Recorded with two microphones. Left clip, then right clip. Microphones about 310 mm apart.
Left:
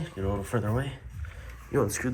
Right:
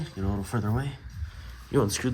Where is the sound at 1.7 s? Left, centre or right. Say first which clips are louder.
Right 1 dB; right.